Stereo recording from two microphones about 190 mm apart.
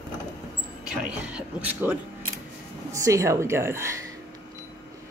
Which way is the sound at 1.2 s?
5° right (ahead or behind).